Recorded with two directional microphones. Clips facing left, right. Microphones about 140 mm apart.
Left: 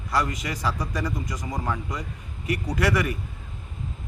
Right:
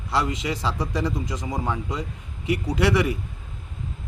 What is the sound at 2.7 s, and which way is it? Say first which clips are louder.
Speech: right 3 dB; 25° right (ahead or behind).